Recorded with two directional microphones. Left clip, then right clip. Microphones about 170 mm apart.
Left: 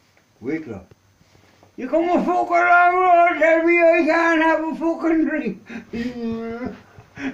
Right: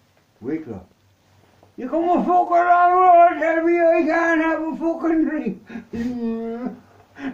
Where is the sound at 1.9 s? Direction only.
15° right (ahead or behind).